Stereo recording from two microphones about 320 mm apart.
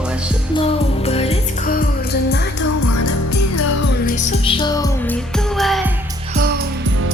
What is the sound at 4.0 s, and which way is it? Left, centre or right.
Music, left.